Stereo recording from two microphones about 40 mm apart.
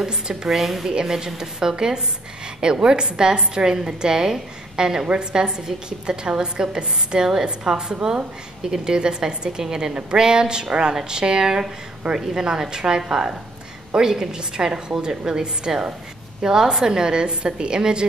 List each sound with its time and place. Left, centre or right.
0.0 s a woman's voice: centre
0.5 s a woman's voice: centre; by 18.0 s right